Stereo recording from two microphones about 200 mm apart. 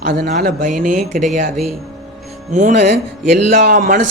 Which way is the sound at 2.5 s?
40° right (ahead or behind).